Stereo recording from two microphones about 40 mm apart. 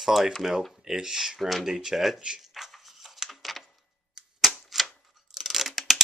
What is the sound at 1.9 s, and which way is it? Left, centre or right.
Speech, centre.